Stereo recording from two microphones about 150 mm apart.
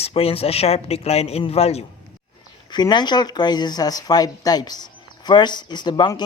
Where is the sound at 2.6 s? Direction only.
30° left (ahead or behind).